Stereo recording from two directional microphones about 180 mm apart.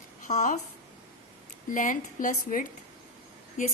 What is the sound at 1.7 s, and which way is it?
A woman's voice, 45° left (ahead or behind).